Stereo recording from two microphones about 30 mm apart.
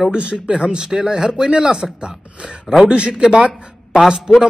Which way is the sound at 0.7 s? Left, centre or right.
Centre.